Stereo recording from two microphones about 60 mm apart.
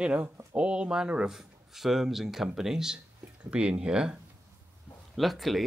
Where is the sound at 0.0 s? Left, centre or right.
Centre.